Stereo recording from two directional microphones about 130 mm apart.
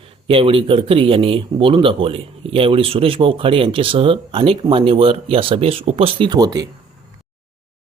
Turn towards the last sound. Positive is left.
turn(degrees=-30)  # may be behind; listen again after turning